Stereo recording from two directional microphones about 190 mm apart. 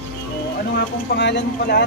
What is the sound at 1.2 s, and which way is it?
Speech, 65° left (ahead or behind).